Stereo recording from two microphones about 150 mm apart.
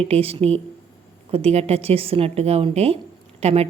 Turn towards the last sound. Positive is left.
turn(degrees=-45)  # may be behind; listen again after turning